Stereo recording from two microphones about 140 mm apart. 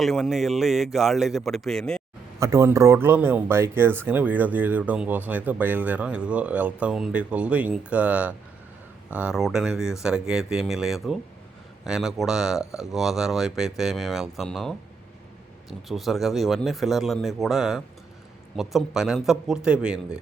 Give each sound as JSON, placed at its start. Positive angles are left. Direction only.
{"t": 0.0, "sound": "speech", "side_deg": 0}
{"t": 2.4, "sound": "speech", "side_deg": -20}
{"t": 15.9, "sound": "speech", "side_deg": 0}